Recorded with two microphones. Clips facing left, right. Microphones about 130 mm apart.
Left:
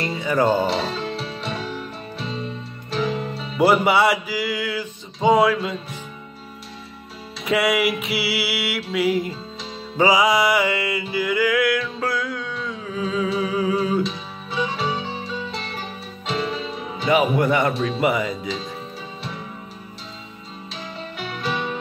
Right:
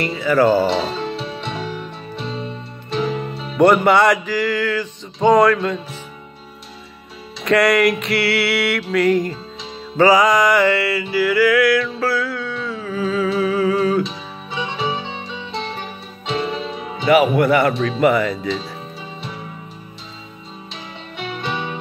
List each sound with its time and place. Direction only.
0.2 s music: 20° left (ahead or behind)
0.5 s music: 5° right (ahead or behind)
7.5 s a sound: 5° left (ahead or behind)
8.7 s music: 5° left (ahead or behind)
13.4 s a sound: 15° left (ahead or behind)
14.0 s music: centre (ahead or behind)
17.4 s music: 20° left (ahead or behind)
17.7 s a sound: 5° left (ahead or behind)
18.0 s music: 15° left (ahead or behind)
21.2 s music: centre (ahead or behind)